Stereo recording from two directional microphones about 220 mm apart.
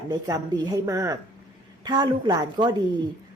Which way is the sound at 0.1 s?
15° right (ahead or behind).